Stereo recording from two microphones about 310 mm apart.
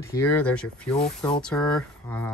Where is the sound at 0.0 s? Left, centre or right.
Centre.